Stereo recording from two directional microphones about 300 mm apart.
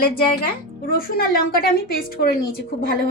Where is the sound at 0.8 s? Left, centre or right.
Left.